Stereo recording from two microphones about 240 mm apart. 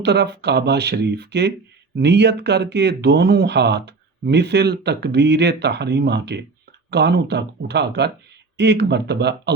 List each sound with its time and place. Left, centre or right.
0.0 s speech: right